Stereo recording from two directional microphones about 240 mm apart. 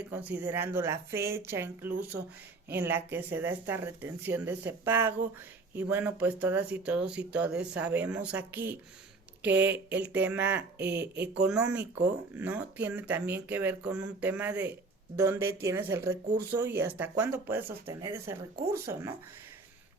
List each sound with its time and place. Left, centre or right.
0.0 s speech: centre
10.8 s speech: right
11.2 s speech: centre